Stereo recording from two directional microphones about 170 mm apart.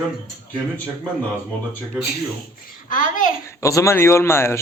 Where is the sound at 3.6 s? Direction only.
15° left (ahead or behind).